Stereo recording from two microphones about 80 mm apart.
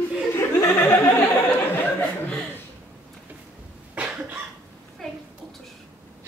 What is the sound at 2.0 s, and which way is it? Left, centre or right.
Chuckle, centre.